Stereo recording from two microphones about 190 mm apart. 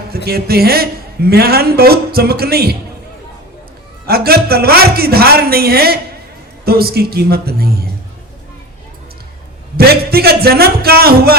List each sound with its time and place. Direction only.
0.3 s speech: 55° right (ahead or behind)
4.0 s speech: 55° right (ahead or behind)
9.7 s speech: 55° right (ahead or behind)